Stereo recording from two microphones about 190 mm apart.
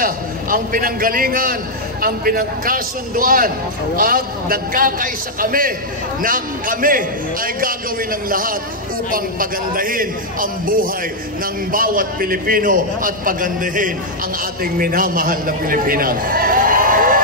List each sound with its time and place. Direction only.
0.0 s a man's voice: 45° right (ahead or behind)